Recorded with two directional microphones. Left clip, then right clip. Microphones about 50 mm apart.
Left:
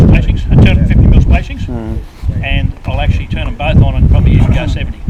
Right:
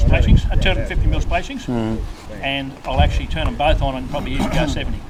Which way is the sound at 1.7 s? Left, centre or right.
Right.